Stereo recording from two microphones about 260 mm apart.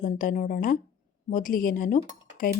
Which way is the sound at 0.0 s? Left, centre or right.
Left.